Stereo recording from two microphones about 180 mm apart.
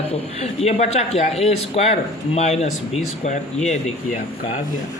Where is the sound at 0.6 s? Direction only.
35° left (ahead or behind).